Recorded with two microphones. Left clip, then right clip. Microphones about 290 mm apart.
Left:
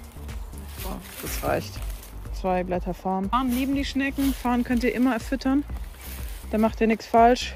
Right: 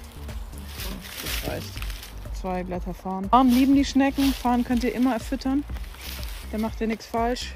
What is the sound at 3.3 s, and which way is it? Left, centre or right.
Speech, centre.